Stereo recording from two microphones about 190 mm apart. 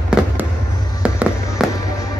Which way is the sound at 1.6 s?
Centre (ahead or behind).